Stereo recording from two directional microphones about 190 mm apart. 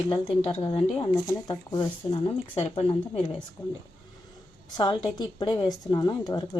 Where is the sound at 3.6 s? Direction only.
10° left (ahead or behind).